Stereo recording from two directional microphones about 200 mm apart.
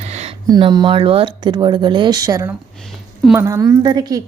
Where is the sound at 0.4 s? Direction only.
20° right (ahead or behind).